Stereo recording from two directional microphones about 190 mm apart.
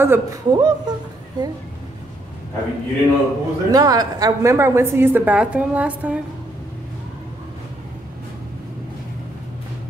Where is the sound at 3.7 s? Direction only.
20° right (ahead or behind).